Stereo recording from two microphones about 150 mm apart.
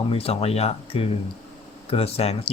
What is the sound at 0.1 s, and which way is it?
Speech, 40° left (ahead or behind).